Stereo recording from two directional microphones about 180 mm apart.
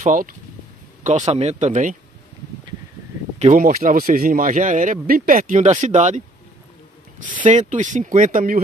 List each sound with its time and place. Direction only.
0.0 s speech: 50° right (ahead or behind)
3.5 s speech: 50° right (ahead or behind)
7.4 s speech: 45° right (ahead or behind)